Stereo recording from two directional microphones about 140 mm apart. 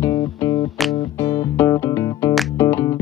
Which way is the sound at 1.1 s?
20° left (ahead or behind).